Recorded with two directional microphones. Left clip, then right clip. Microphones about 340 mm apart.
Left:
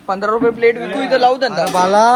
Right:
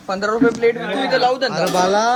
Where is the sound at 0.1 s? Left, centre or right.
Centre.